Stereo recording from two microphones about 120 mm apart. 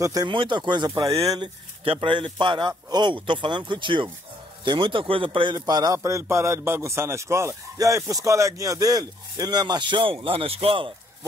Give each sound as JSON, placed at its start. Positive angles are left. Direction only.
{"t": 0.0, "sound": "a man's voice", "side_deg": -30}
{"t": 0.3, "sound": "a man's voice", "side_deg": -40}
{"t": 1.9, "sound": "a man's voice", "side_deg": -45}